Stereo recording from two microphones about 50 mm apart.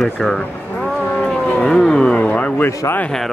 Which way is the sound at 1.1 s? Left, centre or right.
Left.